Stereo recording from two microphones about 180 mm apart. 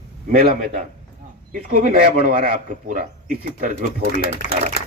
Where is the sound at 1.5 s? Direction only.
50° right (ahead or behind).